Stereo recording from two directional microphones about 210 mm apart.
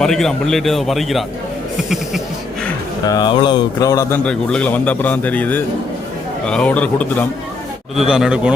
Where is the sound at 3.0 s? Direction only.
20° left (ahead or behind).